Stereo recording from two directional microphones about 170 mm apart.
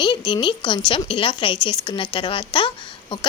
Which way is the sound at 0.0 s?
25° left (ahead or behind).